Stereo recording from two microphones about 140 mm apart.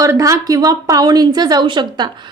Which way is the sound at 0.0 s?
25° right (ahead or behind).